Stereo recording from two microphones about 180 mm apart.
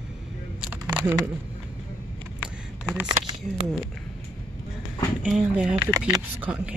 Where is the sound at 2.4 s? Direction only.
5° right (ahead or behind).